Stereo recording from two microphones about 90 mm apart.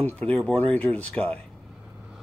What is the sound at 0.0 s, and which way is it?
Speech, 15° left (ahead or behind).